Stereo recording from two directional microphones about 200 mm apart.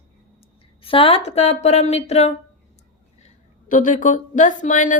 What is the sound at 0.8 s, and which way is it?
A woman's voice, 25° left (ahead or behind).